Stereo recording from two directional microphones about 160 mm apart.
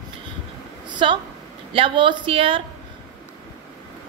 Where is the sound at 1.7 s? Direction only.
30° right (ahead or behind).